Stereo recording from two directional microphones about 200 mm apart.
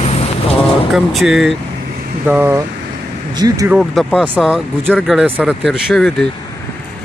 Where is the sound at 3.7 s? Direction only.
Centre (ahead or behind).